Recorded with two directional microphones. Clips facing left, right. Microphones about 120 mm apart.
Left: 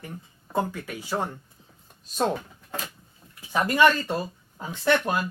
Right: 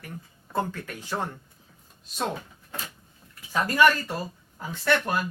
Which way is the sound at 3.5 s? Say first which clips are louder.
Left 1 dB; 20° left (ahead or behind).